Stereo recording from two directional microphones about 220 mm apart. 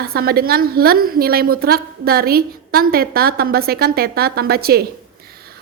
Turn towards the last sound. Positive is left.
turn(degrees=-45)  # may be behind; listen again after turning